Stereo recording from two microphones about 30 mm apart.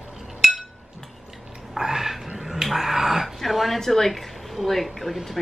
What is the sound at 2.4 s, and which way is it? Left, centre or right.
Dog, centre.